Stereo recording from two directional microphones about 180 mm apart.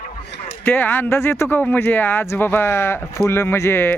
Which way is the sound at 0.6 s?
10° left (ahead or behind).